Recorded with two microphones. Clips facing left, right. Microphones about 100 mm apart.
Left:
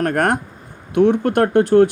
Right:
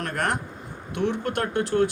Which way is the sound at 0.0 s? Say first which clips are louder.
Left 9 dB; 50° left (ahead or behind).